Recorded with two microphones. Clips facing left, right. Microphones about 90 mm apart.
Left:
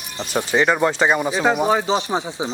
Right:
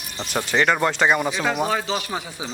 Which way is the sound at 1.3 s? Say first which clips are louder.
Left 5 dB; 25° left (ahead or behind).